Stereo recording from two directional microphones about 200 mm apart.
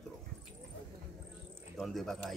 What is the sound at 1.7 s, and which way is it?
Speech, centre (ahead or behind).